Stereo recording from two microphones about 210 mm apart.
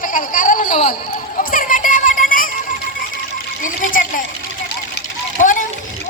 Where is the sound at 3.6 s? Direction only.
40° left (ahead or behind).